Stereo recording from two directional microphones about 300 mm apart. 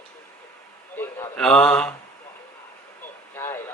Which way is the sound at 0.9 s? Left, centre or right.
Centre.